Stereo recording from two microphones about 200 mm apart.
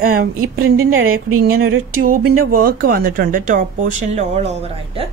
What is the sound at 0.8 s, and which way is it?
Speech, 90° right.